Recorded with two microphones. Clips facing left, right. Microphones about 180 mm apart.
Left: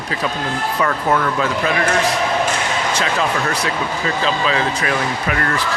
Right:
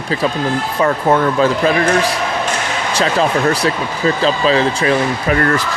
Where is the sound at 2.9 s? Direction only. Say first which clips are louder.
Right 7 dB; 35° right (ahead or behind).